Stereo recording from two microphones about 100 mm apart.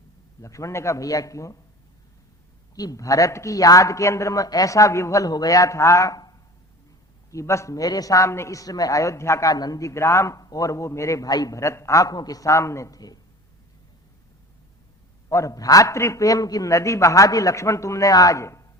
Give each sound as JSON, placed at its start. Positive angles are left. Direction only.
{"t": 0.4, "sound": "a man's voice", "side_deg": 30}
{"t": 2.7, "sound": "a man's voice", "side_deg": 35}
{"t": 15.3, "sound": "a man's voice", "side_deg": 30}